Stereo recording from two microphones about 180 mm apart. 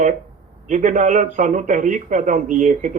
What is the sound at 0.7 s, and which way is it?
A man's voice, 45° right (ahead or behind).